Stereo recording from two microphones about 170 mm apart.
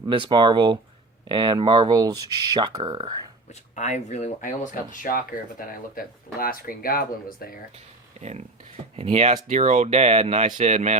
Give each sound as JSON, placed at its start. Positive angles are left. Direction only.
{"t": 0.1, "sound": "speech", "side_deg": -25}
{"t": 3.8, "sound": "speech", "side_deg": 45}
{"t": 9.0, "sound": "speech", "side_deg": -35}